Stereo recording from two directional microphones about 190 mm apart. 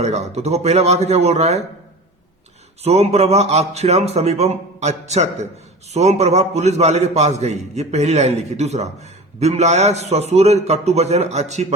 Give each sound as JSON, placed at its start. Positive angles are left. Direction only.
{"t": 0.0, "sound": "a man's voice", "side_deg": -35}
{"t": 2.8, "sound": "a man's voice", "side_deg": -35}